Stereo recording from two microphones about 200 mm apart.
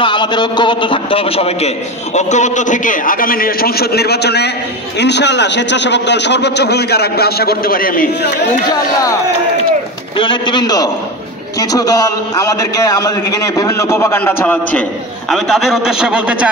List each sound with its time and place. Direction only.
0.0 s a man's voice: 25° left (ahead or behind); by 8.3 s 45° left (ahead or behind)
10.1 s a man's voice: 25° left (ahead or behind); by 16.4 s 5° right (ahead or behind)